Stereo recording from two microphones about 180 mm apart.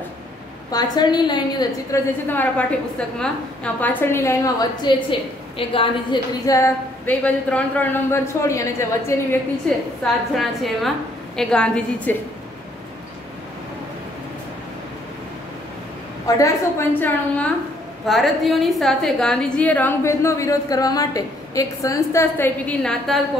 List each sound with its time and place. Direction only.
0.7 s a woman's voice: 20° left (ahead or behind)
2.2 s a woman's voice: 10° left (ahead or behind)
5.6 s a woman's voice: 30° left (ahead or behind)
10.3 s a woman's voice: centre (ahead or behind)
16.3 s a woman's voice: 15° left (ahead or behind)